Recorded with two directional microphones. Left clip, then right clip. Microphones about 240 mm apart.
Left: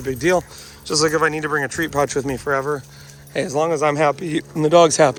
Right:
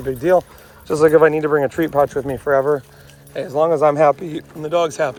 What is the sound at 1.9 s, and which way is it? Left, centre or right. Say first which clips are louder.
Speech: right 2 dB; centre.